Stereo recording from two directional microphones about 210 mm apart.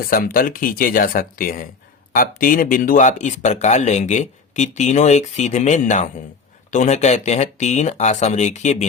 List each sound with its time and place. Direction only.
0.1 s speech: 45° left (ahead or behind)